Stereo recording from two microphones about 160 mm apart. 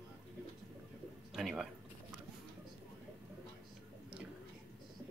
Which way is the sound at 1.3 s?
Centre (ahead or behind).